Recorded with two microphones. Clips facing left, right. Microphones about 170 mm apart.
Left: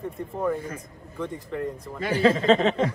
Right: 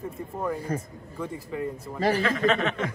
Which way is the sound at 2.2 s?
35° left (ahead or behind).